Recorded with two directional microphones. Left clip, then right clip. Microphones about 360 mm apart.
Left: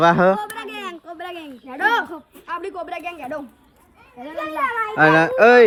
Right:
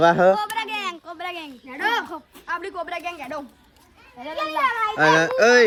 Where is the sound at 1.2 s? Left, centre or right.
Centre.